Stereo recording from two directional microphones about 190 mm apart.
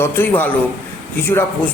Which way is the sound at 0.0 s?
10° left (ahead or behind).